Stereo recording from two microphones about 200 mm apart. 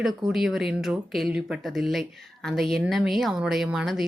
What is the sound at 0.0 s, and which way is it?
Speech, 5° right (ahead or behind).